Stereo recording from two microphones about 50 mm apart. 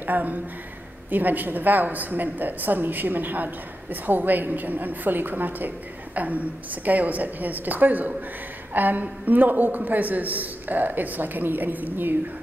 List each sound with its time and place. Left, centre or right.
0.0 s a woman's voice: right